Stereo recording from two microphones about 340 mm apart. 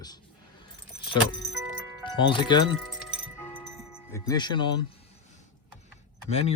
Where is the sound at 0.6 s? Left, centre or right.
Centre.